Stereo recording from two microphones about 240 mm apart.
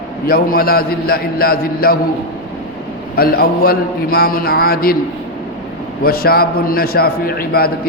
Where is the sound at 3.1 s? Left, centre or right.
Left.